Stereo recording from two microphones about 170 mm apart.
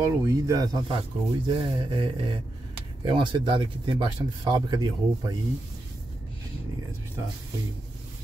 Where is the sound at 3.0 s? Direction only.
30° right (ahead or behind).